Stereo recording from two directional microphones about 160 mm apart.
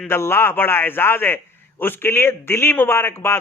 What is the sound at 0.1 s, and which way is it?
A man's voice, 15° left (ahead or behind).